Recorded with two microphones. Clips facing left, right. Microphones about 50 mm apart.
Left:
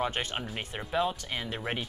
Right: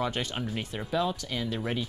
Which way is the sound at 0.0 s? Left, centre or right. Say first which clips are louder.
Right 1 dB; left.